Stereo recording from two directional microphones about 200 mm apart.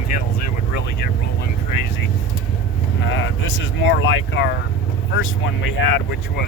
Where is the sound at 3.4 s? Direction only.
75° left (ahead or behind).